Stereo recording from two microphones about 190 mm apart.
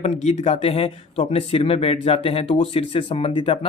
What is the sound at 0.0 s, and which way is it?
A man's voice, 35° left (ahead or behind).